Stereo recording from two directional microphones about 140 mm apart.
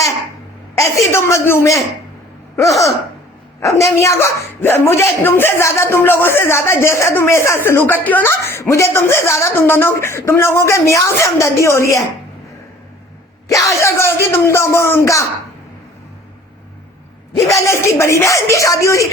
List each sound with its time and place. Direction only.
0.8 s a woman's voice: 20° left (ahead or behind)
13.5 s a woman's voice: 25° left (ahead or behind)
17.3 s a woman's voice: 25° left (ahead or behind)